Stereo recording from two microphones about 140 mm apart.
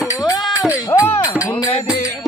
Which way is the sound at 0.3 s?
25° left (ahead or behind).